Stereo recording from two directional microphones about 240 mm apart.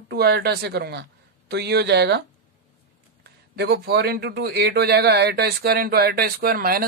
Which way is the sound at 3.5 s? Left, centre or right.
Right.